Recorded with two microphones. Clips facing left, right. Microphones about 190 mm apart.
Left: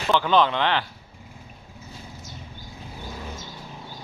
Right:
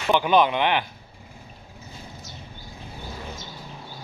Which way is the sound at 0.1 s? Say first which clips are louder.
Right 1 dB; 15° right (ahead or behind).